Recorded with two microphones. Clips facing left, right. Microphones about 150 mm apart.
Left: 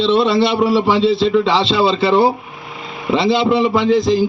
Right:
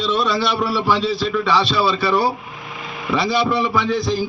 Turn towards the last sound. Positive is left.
turn(degrees=20)  # may be behind; listen again after turning